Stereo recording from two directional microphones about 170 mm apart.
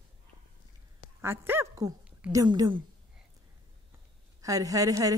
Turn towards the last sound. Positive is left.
turn(degrees=-20)  # may be behind; listen again after turning